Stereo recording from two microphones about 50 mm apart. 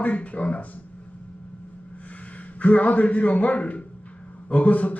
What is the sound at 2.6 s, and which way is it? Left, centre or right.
A man's voice, left.